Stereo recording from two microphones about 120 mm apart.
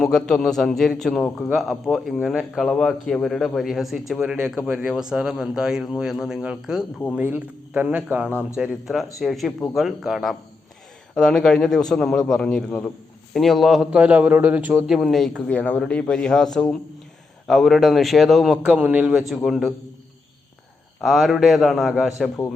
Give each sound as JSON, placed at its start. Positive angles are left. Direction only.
{"t": 0.0, "sound": "a man's voice", "side_deg": 5}
{"t": 8.3, "sound": "speech", "side_deg": 20}
{"t": 8.5, "sound": "a man's voice", "side_deg": -5}
{"t": 21.0, "sound": "a man's voice", "side_deg": 0}